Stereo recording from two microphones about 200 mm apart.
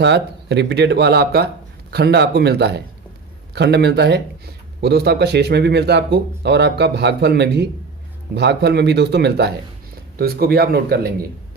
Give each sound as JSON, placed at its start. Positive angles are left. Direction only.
{"t": 0.0, "sound": "a man's voice", "side_deg": -60}